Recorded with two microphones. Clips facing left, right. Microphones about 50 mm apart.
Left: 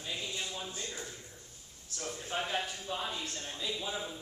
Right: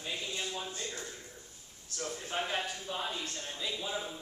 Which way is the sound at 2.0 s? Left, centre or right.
Centre.